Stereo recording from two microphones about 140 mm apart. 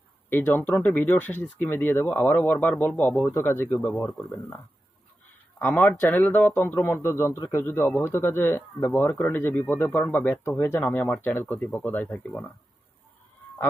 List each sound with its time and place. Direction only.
0.3 s speech: 15° left (ahead or behind)